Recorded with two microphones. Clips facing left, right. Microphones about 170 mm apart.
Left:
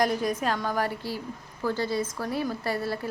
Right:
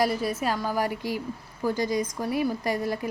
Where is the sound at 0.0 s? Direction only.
5° right (ahead or behind).